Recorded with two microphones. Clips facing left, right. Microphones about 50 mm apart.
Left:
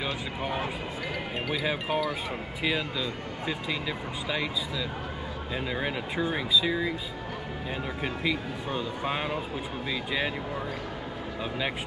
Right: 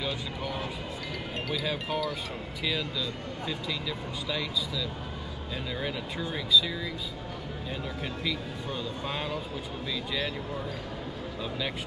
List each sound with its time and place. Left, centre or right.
0.0 s speech: left
8.0 s speech: left